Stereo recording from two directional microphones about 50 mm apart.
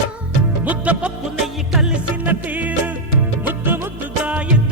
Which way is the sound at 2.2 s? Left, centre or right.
Right.